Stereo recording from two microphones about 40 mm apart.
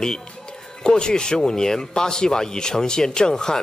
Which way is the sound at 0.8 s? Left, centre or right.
Left.